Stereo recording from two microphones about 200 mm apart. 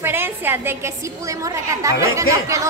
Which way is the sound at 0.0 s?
10° right (ahead or behind).